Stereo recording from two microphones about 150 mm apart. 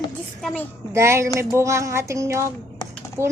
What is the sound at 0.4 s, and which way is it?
Speech, 10° left (ahead or behind).